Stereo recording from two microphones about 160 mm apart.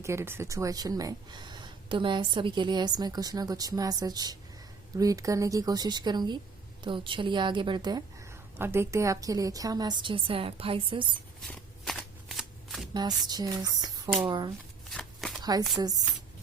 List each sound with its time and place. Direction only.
0.0 s speech: 15° right (ahead or behind); by 11.0 s 35° right (ahead or behind)
11.4 s shuffling cards: centre (ahead or behind)
12.9 s speech: 25° right (ahead or behind)
14.8 s shuffling cards: centre (ahead or behind)
15.4 s speech: 25° right (ahead or behind)